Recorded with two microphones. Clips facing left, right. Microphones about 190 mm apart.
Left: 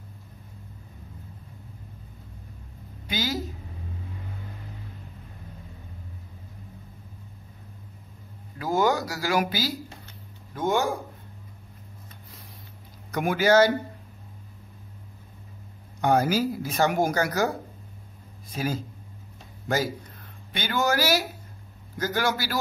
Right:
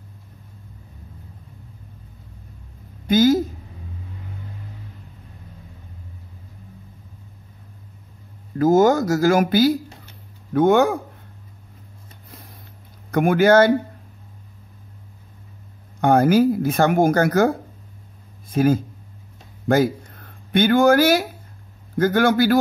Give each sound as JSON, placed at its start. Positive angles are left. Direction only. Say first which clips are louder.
{"t": 3.1, "sound": "a sound", "louder": "right 14 dB", "side_deg": -50}
{"t": 8.5, "sound": "speech", "louder": "right 9 dB", "side_deg": -45}
{"t": 13.1, "sound": "speech", "louder": "right 6 dB", "side_deg": -55}
{"t": 16.0, "sound": "speech", "louder": "right 7 dB", "side_deg": -55}
{"t": 20.2, "sound": "speech", "louder": "right 16 dB", "side_deg": -55}